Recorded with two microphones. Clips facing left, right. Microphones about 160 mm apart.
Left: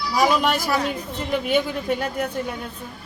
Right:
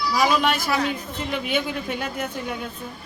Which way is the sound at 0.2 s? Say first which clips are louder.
Left 2 dB; 40° left (ahead or behind).